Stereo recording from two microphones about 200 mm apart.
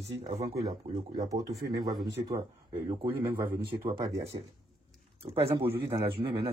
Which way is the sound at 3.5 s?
25° right (ahead or behind).